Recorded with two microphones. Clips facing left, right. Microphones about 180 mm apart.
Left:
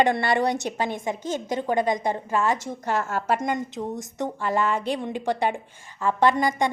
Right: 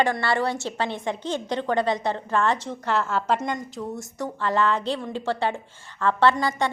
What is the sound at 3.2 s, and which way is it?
A woman's voice, 10° left (ahead or behind).